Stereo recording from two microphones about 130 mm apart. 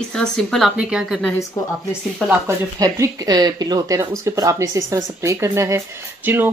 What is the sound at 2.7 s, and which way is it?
Speech, 25° right (ahead or behind).